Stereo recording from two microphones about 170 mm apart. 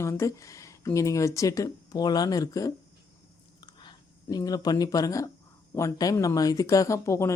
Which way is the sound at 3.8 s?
20° left (ahead or behind).